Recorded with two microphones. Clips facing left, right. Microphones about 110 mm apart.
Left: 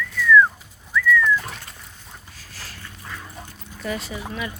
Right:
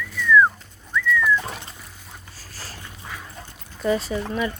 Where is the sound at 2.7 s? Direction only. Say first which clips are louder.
Right 1 dB; 15° right (ahead or behind).